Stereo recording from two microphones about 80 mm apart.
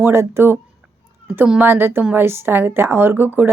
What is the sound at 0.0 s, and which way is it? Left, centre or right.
Speech, right.